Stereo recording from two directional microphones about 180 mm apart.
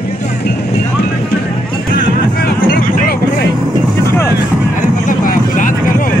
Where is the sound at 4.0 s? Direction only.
15° left (ahead or behind).